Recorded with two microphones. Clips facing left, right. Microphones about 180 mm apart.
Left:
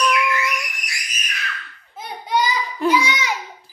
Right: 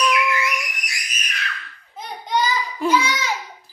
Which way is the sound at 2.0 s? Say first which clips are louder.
Left 1 dB; 5° left (ahead or behind).